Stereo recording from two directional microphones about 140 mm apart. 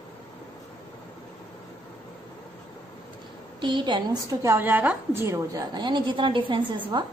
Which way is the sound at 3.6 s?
35° right (ahead or behind).